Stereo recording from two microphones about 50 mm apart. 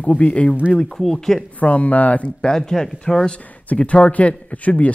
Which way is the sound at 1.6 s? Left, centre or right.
Left.